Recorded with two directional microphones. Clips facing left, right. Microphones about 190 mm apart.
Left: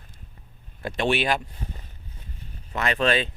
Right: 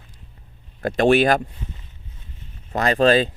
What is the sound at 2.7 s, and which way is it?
Speech, 35° right (ahead or behind).